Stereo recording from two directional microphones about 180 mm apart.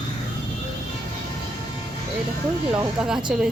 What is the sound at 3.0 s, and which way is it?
Speech, 5° right (ahead or behind).